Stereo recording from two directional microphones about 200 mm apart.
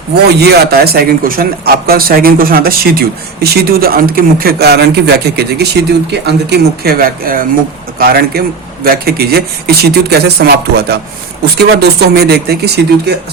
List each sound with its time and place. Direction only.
0.3 s speech: 55° right (ahead or behind)